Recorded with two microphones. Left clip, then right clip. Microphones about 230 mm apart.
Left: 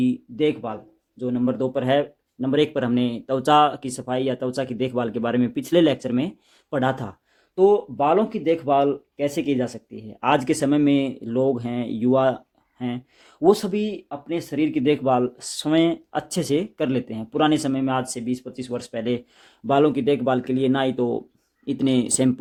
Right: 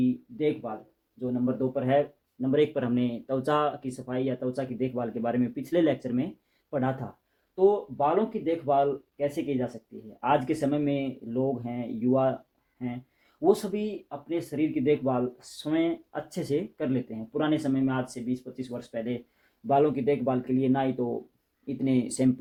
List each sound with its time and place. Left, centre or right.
0.0 s speech: left
7.5 s speech: left
13.4 s speech: left
19.6 s speech: left